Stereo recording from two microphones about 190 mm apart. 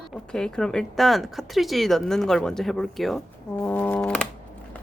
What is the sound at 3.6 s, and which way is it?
Brass instrument, 10° left (ahead or behind).